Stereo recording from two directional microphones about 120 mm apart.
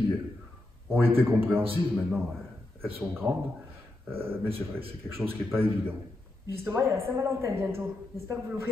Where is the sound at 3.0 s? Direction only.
20° right (ahead or behind).